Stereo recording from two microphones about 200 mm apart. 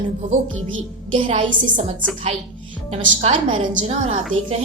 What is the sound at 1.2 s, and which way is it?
Speech, 30° right (ahead or behind).